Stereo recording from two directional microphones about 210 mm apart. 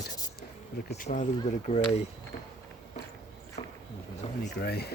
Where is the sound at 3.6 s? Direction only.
30° left (ahead or behind).